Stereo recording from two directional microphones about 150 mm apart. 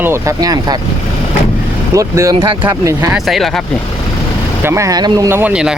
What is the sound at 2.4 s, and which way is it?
Speech, 35° right (ahead or behind).